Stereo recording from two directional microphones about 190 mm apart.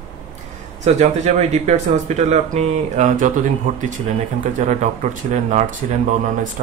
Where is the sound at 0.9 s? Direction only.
35° right (ahead or behind).